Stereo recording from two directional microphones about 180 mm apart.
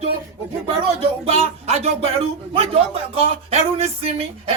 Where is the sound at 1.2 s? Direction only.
35° right (ahead or behind).